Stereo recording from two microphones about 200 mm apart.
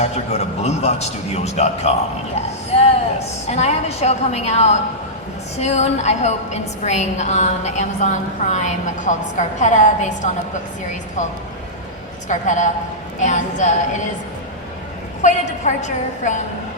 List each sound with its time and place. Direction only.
0.0 s a woman's voice: 35° left (ahead or behind)
12.3 s a woman's voice: 40° left (ahead or behind)
15.2 s a woman's voice: 35° left (ahead or behind)